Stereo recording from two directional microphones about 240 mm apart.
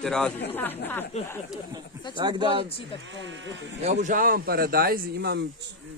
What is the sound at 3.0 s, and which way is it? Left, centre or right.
Speech, right.